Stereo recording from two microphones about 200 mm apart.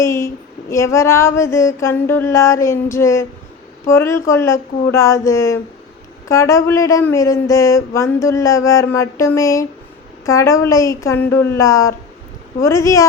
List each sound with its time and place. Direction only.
0.0 s speech: 15° left (ahead or behind)